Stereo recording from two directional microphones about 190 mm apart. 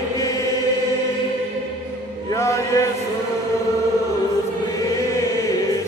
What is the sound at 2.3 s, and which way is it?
Chant, 15° left (ahead or behind).